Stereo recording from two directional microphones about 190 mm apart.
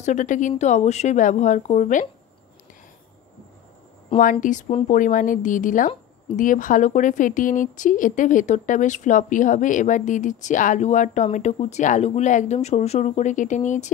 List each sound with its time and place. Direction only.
0.0 s a woman's voice: 40° left (ahead or behind)
4.2 s a woman's voice: 45° left (ahead or behind)